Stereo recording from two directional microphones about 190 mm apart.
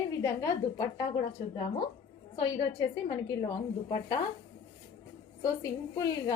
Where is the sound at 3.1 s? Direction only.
20° left (ahead or behind).